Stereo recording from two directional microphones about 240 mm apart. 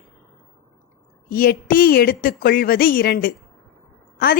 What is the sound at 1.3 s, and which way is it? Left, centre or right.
Speech, left.